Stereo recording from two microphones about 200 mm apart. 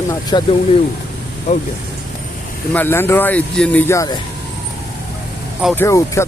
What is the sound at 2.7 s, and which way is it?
Speech, 10° left (ahead or behind).